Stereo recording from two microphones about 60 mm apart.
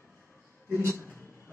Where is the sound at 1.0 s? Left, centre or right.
Left.